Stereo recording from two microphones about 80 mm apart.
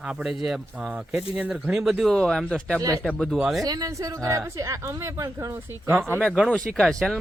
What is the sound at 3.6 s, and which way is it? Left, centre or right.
Speech, right.